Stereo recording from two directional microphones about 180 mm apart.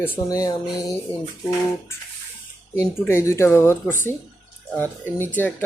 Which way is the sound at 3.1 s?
15° left (ahead or behind).